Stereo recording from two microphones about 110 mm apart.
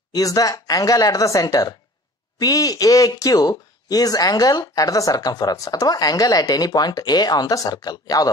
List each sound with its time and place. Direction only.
0.1 s speech: 35° left (ahead or behind)